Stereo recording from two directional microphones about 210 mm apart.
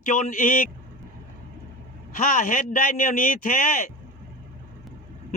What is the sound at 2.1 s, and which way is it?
A man's voice, 40° left (ahead or behind).